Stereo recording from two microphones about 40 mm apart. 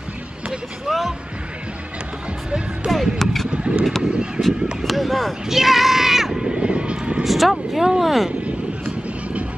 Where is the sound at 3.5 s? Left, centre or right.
Right.